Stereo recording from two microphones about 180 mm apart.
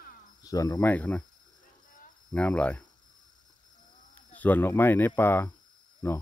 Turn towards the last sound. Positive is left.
turn(degrees=15)  # may be behind; listen again after turning